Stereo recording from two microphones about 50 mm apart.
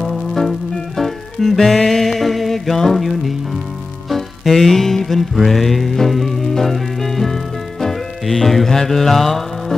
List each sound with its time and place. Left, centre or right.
0.0 s music: centre